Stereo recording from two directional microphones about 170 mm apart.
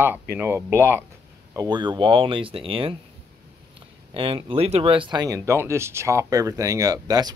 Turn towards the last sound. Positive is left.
turn(degrees=-20)  # may be behind; listen again after turning